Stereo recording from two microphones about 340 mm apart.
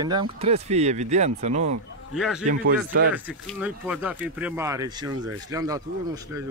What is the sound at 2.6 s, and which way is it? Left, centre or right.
Speech, right.